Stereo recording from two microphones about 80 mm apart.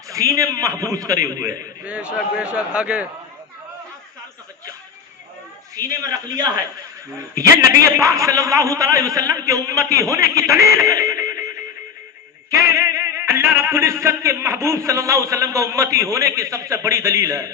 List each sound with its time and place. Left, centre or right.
0.1 s a man's voice: right
1.8 s a man's voice: centre
5.7 s a man's voice: right
7.9 s a man's voice: right
12.5 s music: right